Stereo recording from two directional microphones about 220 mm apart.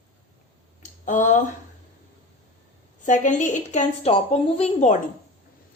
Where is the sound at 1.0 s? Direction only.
35° left (ahead or behind).